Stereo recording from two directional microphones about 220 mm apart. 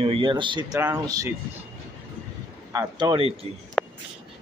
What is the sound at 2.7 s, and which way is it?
Speech, 15° right (ahead or behind).